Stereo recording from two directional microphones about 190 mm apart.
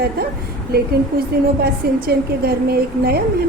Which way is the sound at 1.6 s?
55° right (ahead or behind).